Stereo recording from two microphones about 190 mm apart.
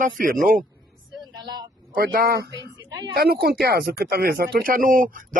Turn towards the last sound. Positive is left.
turn(degrees=-45)  # may be behind; listen again after turning